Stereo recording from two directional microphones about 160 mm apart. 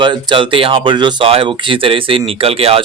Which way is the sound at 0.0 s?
30° right (ahead or behind).